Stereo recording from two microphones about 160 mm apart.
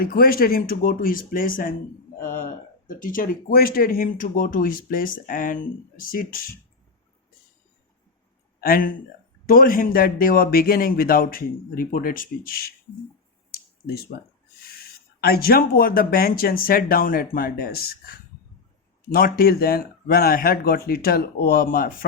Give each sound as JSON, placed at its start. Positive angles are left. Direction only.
{"t": 0.0, "sound": "speech", "side_deg": 65}
{"t": 8.6, "sound": "speech", "side_deg": 60}
{"t": 14.1, "sound": "speech", "side_deg": 70}
{"t": 19.1, "sound": "speech", "side_deg": 70}